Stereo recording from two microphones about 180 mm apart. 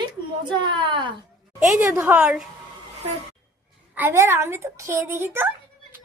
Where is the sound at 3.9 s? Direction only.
10° right (ahead or behind).